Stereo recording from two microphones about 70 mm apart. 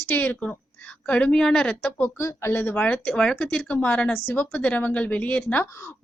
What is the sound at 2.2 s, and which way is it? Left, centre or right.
A woman's voice, left.